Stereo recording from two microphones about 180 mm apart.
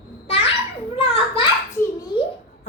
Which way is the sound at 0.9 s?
30° left (ahead or behind).